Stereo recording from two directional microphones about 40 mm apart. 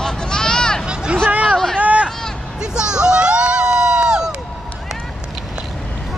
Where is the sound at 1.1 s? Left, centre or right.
Right.